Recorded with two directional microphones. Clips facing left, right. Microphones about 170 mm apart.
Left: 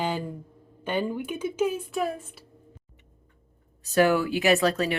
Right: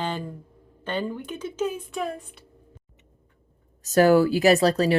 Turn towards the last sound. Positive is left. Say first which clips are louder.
# right 4 dB
turn(degrees=-35)  # may be behind; listen again after turning